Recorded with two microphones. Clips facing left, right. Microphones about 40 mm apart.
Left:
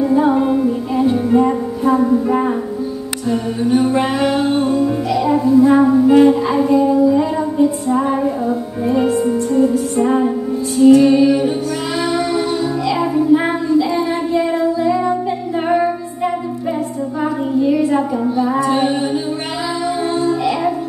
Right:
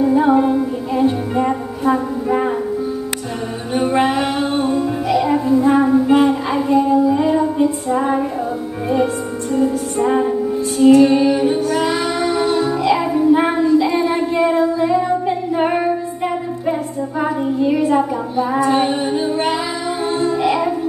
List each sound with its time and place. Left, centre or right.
1.3 s music: centre
7.1 s music: centre
8.5 s music: centre
10.9 s child singing: right
12.1 s music: centre
12.9 s child singing: centre
14.8 s music: centre
18.4 s child singing: right